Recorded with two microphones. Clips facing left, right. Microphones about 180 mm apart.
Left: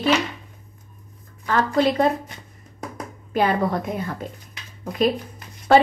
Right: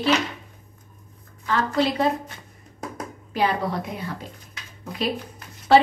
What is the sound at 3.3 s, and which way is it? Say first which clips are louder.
Speech: left 3 dB; 50° left (ahead or behind).